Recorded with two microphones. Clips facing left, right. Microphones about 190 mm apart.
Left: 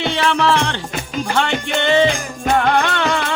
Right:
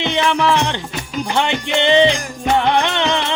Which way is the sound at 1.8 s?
20° right (ahead or behind).